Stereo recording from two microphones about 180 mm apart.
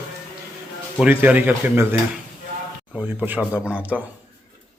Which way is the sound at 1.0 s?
10° right (ahead or behind).